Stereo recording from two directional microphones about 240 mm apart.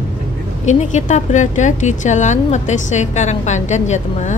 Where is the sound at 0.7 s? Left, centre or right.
Left.